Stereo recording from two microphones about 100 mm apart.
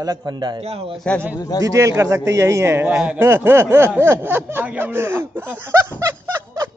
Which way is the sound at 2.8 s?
15° right (ahead or behind).